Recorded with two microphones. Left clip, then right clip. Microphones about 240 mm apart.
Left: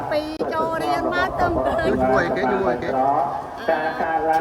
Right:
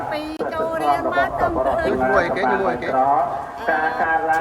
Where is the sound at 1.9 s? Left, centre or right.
Centre.